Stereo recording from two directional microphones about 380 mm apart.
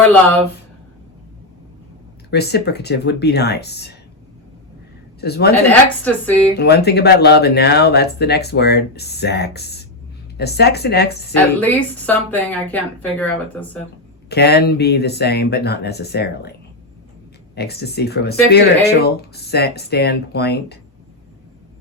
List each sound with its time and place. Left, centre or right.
0.0 s speech: centre
2.3 s speech: left
5.2 s speech: left
6.1 s speech: centre
6.6 s speech: left
11.6 s speech: centre
14.3 s speech: left
17.5 s speech: left